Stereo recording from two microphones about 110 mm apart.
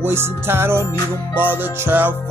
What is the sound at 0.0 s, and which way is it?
Music, 20° right (ahead or behind).